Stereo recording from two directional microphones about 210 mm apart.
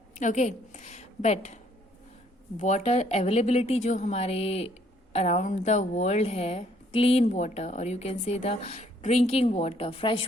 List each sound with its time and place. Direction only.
0.1 s a woman's voice: 35° left (ahead or behind)
2.6 s a woman's voice: 35° left (ahead or behind)